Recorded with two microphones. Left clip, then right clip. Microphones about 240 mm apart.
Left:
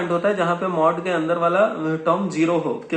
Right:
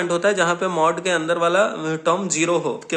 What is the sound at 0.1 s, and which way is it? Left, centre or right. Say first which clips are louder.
Speech: right 1 dB; right.